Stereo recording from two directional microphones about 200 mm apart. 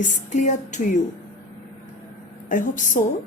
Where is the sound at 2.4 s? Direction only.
40° left (ahead or behind).